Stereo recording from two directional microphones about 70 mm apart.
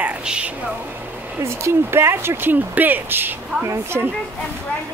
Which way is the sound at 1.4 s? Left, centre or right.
Right.